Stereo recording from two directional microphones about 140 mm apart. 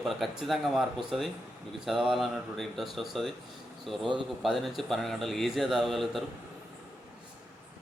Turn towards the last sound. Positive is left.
turn(degrees=0)  # may be behind; listen again after turning